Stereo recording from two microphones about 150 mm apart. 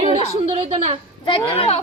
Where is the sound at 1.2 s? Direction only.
40° left (ahead or behind).